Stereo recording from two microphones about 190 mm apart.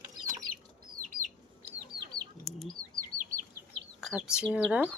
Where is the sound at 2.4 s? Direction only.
Centre (ahead or behind).